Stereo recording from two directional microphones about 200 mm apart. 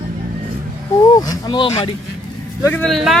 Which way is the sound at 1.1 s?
20° left (ahead or behind).